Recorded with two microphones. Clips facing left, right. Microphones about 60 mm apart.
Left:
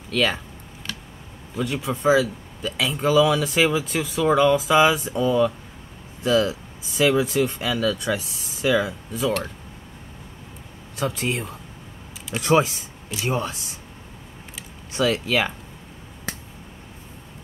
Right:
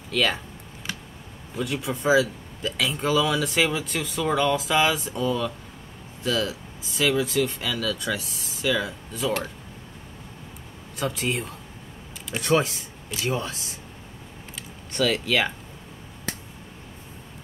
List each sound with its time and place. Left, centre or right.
0.1 s speech: centre
1.6 s speech: centre
11.0 s speech: centre
14.5 s a sound: centre